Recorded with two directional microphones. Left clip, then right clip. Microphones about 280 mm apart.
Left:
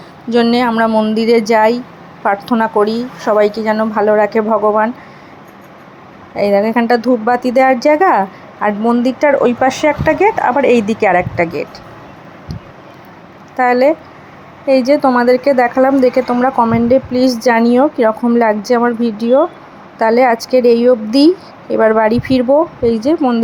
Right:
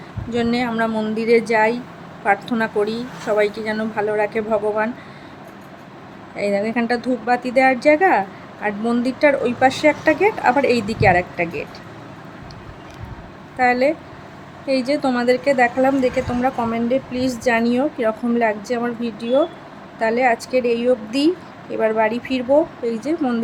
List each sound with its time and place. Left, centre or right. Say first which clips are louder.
0.3 s a woman's voice: left 9 dB; centre
6.3 s a woman's voice: left 8 dB; centre
13.6 s a woman's voice: left 6 dB; centre